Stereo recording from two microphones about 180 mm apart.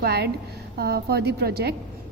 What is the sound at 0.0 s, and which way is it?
Speech, 60° right (ahead or behind).